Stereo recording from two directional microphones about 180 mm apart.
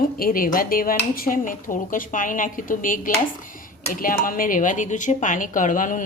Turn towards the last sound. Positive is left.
turn(degrees=45)  # may be behind; listen again after turning